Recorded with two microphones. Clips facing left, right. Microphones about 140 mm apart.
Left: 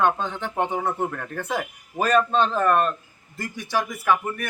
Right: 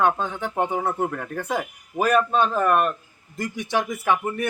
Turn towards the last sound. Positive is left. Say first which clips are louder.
# even
turn(degrees=-20)  # may be behind; listen again after turning